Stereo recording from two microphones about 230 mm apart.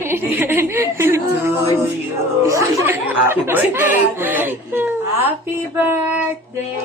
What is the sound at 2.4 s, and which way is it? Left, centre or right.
Chuckle, centre.